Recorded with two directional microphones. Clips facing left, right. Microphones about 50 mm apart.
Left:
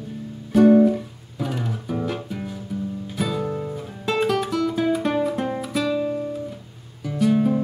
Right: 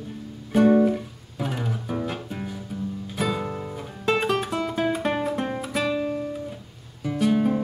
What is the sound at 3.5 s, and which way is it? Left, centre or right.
Guitar, centre.